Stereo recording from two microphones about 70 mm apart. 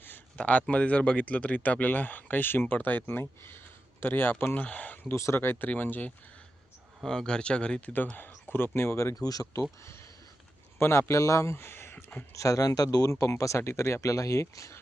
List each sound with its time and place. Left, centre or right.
0.3 s speech: centre
5.1 s speech: left
7.0 s speech: centre
7.9 s speech: left
9.1 s speech: left
10.8 s speech: left
11.5 s a sound: left
12.3 s speech: left